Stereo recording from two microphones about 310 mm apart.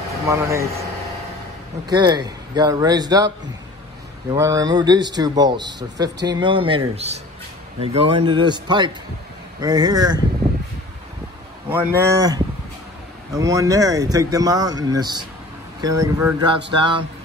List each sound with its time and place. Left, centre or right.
0.3 s speech: centre
1.9 s speech: centre
4.3 s speech: centre
11.7 s speech: centre